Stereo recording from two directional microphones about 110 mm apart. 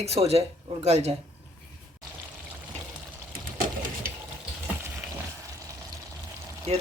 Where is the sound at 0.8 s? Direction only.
85° right.